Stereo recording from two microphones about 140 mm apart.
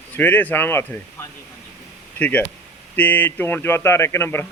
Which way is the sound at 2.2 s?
10° left (ahead or behind).